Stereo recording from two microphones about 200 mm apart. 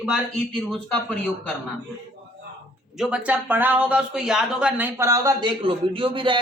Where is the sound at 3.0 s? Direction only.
5° right (ahead or behind).